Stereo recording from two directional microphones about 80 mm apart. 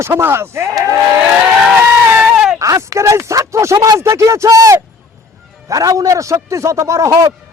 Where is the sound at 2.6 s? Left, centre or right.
Right.